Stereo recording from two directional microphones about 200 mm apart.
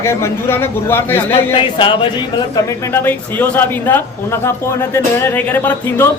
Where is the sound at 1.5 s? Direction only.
25° left (ahead or behind).